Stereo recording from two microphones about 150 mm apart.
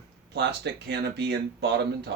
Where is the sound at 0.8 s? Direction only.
90° right.